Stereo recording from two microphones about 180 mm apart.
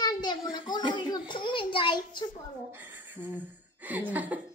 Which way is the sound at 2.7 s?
10° right (ahead or behind).